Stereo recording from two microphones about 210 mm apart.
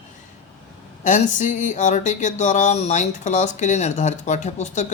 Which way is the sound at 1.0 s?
35° left (ahead or behind).